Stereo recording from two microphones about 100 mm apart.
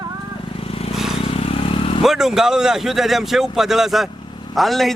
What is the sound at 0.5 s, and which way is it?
Vehicle, 75° left (ahead or behind).